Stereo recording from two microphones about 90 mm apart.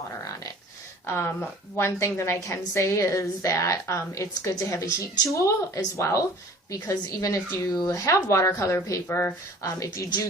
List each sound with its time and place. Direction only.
1.0 s a woman's voice: 30° left (ahead or behind)